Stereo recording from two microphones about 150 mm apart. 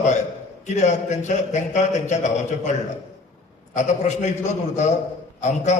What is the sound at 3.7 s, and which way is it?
A man's voice, 50° left (ahead or behind).